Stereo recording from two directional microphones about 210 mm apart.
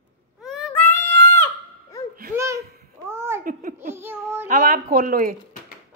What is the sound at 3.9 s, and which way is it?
Child singing, 10° right (ahead or behind).